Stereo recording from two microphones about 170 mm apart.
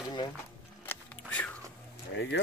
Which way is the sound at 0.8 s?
10° left (ahead or behind).